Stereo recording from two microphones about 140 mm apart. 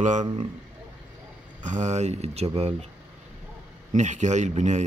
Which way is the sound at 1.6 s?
60° right (ahead or behind).